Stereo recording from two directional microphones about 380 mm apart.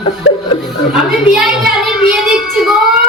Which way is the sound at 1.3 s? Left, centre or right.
Centre.